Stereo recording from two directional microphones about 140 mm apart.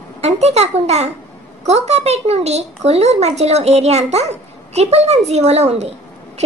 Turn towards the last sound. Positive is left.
turn(degrees=-50)  # may be behind; listen again after turning